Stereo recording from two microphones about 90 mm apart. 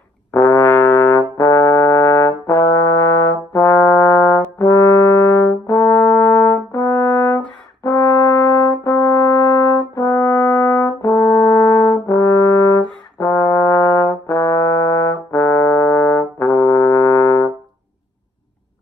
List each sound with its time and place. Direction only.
0.3 s brass instrument: 30° left (ahead or behind)